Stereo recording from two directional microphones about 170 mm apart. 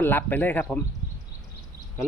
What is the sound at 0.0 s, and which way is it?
Speech, 10° left (ahead or behind).